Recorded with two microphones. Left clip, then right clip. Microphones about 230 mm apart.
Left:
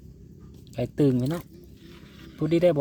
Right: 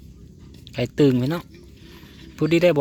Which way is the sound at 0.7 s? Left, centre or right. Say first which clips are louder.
Right 5 dB; centre.